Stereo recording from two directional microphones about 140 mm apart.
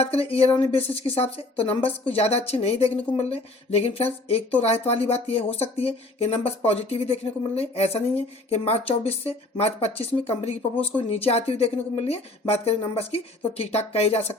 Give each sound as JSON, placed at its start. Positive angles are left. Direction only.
{"t": 0.0, "sound": "speech", "side_deg": 45}